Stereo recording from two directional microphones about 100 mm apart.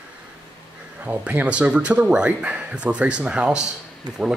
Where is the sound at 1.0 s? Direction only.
15° right (ahead or behind).